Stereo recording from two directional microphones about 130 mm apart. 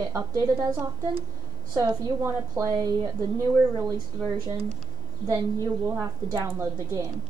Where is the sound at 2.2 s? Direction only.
25° right (ahead or behind).